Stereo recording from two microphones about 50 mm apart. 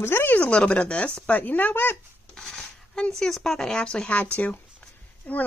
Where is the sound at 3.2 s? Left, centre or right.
Centre.